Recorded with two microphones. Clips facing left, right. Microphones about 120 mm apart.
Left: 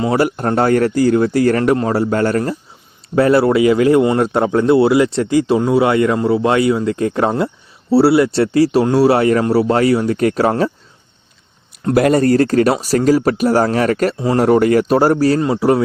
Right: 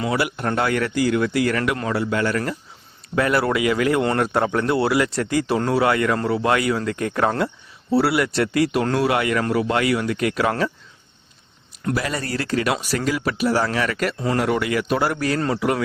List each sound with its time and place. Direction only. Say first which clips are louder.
0.0 s speech: left 7 dB; 40° left (ahead or behind)
3.2 s speech: left 8 dB; 30° left (ahead or behind)
11.9 s speech: left 16 dB; 50° left (ahead or behind); by 15.8 s 30° left (ahead or behind)